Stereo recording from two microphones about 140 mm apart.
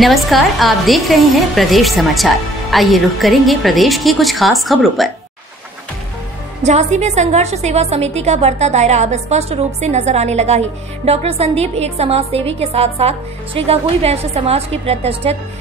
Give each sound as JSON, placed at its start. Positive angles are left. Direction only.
{"t": 0.0, "sound": "a woman's voice", "side_deg": 0}
{"t": 6.6, "sound": "a woman's voice", "side_deg": -55}